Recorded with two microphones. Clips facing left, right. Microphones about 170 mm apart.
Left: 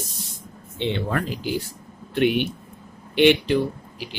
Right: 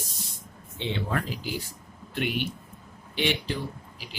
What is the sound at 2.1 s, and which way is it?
Speech, 70° left (ahead or behind).